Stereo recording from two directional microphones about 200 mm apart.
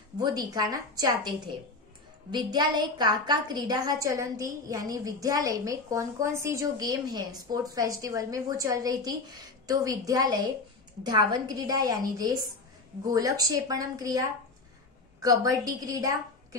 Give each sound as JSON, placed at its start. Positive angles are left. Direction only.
{"t": 0.2, "sound": "a woman's voice", "side_deg": -20}
{"t": 2.3, "sound": "a woman's voice", "side_deg": -20}
{"t": 13.0, "sound": "a woman's voice", "side_deg": -20}